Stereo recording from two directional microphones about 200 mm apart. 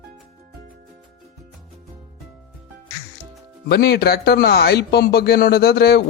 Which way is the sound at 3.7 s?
50° left (ahead or behind).